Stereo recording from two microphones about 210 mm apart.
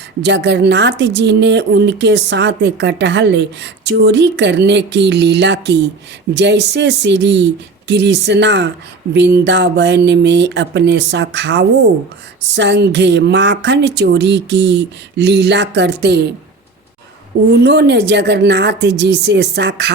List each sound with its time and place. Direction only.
0.2 s speech: 55° right (ahead or behind)
17.6 s speech: 55° right (ahead or behind)